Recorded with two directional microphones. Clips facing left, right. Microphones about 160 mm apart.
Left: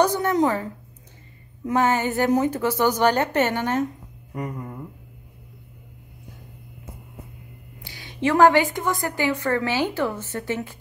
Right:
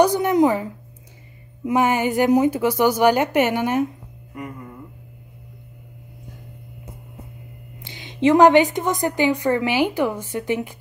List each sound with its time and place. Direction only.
0.0 s a woman's voice: 10° right (ahead or behind)
1.7 s a woman's voice: 15° right (ahead or behind)
7.8 s a woman's voice: 20° right (ahead or behind)